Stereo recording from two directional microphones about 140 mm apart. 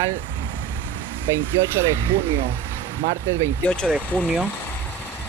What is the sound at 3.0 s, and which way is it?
Speech, 90° right.